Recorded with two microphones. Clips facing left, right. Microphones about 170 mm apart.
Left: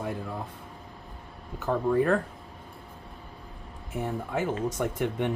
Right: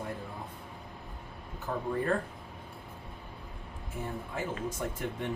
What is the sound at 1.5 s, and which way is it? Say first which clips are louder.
Speech: left 8 dB; 75° left (ahead or behind).